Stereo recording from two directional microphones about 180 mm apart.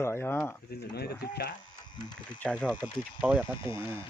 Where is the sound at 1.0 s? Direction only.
65° left (ahead or behind).